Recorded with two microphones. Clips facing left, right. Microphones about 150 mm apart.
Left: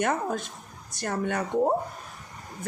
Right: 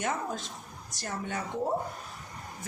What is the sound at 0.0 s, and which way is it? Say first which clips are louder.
Speech: left 6 dB; 60° left (ahead or behind).